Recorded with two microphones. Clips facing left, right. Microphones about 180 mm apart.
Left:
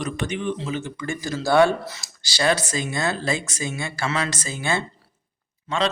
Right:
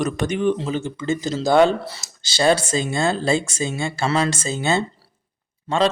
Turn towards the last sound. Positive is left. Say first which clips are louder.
# right 5 dB
turn(degrees=-35)  # may be behind; listen again after turning